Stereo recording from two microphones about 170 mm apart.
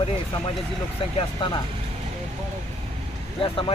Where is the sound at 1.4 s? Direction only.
30° left (ahead or behind).